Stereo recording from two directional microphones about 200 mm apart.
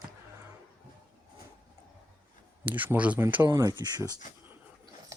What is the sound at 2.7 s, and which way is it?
Speech, 10° right (ahead or behind).